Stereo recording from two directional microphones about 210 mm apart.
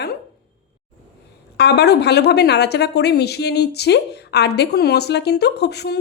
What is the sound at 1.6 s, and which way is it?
Speech, 50° left (ahead or behind).